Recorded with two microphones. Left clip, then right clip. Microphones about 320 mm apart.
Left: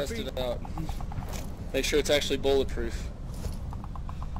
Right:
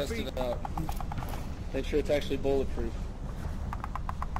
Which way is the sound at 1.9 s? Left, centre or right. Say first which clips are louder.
Left 3 dB; left.